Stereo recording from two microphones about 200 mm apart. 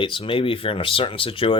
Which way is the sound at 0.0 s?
25° left (ahead or behind).